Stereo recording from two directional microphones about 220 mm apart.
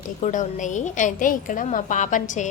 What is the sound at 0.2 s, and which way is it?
A woman's voice, 35° left (ahead or behind).